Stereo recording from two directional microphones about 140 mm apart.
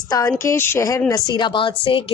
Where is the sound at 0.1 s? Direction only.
25° left (ahead or behind).